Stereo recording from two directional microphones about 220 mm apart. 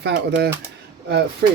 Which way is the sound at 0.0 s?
50° right (ahead or behind).